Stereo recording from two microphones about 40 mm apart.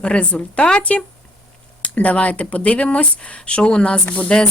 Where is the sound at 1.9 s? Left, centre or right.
Left.